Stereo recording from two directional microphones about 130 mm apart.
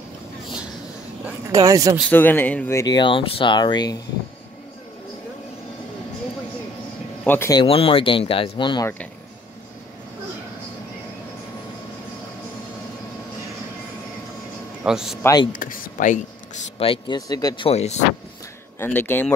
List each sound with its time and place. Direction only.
1.5 s speech: 25° right (ahead or behind)
2.0 s speech: 15° left (ahead or behind)
2.9 s speech: 40° left (ahead or behind)
7.2 s speech: 20° left (ahead or behind)
7.6 s speech: 45° left (ahead or behind)
14.9 s a man's voice: 5° right (ahead or behind)
15.5 s speech: 90° left
16.7 s speech: 45° left (ahead or behind)
17.3 s speech: 30° left (ahead or behind)
17.6 s speech: 55° left (ahead or behind)
18.8 s speech: 15° left (ahead or behind)